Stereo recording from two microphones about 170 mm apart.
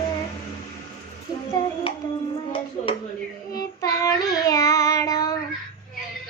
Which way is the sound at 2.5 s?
30° left (ahead or behind).